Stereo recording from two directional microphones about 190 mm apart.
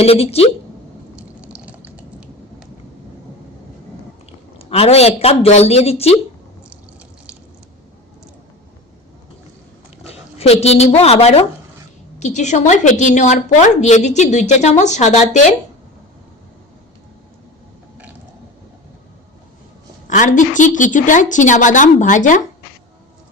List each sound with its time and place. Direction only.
0.0 s a woman's voice: 30° left (ahead or behind)
1.4 s a sound: 5° right (ahead or behind)
4.3 s a man's voice: 30° left (ahead or behind)
10.0 s a woman's voice: 30° left (ahead or behind)
20.1 s a woman's voice: 40° left (ahead or behind)